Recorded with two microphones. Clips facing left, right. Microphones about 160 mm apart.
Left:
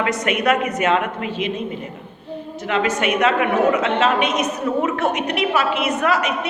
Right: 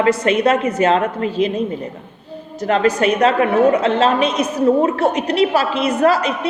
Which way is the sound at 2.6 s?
35° right (ahead or behind).